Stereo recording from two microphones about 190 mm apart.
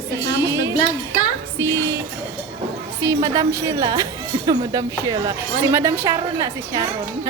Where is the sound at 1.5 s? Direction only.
15° right (ahead or behind).